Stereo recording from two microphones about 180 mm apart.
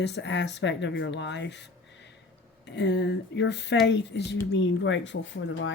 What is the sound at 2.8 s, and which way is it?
Speech, 75° left (ahead or behind).